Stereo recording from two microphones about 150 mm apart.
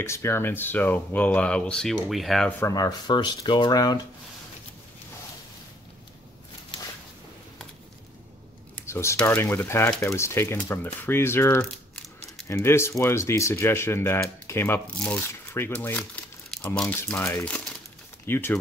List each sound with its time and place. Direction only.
0.0 s speech: 20° left (ahead or behind); by 2.5 s centre (ahead or behind)
2.6 s speech: 25° left (ahead or behind)
8.7 s a sound: 15° left (ahead or behind)
9.2 s speech: 15° left (ahead or behind)